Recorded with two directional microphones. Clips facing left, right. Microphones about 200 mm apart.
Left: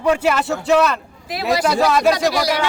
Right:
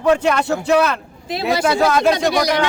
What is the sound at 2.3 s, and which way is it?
Speech, 20° right (ahead or behind).